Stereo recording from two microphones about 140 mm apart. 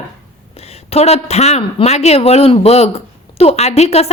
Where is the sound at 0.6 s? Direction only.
50° left (ahead or behind).